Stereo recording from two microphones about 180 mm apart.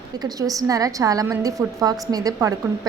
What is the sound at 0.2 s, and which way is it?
A woman's voice, 20° right (ahead or behind).